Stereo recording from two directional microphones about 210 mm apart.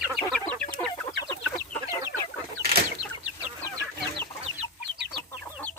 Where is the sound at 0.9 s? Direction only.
20° left (ahead or behind).